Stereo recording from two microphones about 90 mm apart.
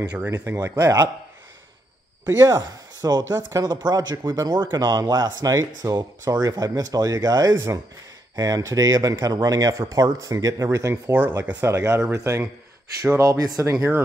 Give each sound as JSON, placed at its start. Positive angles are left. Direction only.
{"t": 0.2, "sound": "speech", "side_deg": -20}
{"t": 2.2, "sound": "speech", "side_deg": -40}